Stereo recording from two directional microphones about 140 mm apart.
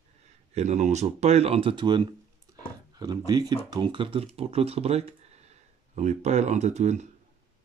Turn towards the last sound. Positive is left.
turn(degrees=-55)  # may be behind; listen again after turning